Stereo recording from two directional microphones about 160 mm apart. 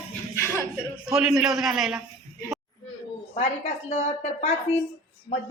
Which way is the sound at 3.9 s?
45° left (ahead or behind).